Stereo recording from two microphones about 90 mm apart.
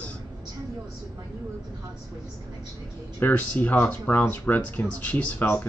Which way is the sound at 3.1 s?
20° left (ahead or behind).